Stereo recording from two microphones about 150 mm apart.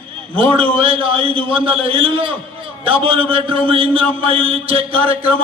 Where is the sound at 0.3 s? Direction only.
40° right (ahead or behind).